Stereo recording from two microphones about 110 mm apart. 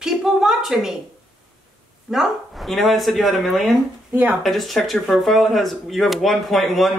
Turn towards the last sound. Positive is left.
turn(degrees=0)  # may be behind; listen again after turning